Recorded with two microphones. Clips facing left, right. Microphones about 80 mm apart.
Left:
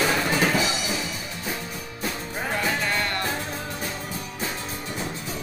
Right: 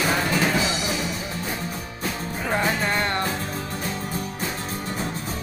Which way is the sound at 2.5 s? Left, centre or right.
Right.